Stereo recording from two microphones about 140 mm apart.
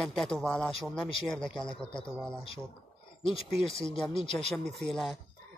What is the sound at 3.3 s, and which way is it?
Speech, 40° left (ahead or behind).